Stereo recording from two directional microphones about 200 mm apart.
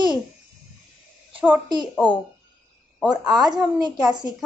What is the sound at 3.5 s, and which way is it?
Speech, 20° right (ahead or behind).